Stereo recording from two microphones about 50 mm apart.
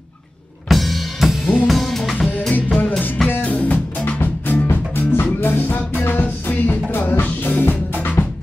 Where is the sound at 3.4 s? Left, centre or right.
Left.